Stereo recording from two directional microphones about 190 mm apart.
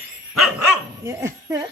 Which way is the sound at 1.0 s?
15° right (ahead or behind).